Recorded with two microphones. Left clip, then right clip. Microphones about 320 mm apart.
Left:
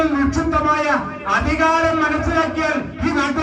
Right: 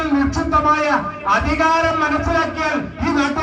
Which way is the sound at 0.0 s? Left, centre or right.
Centre.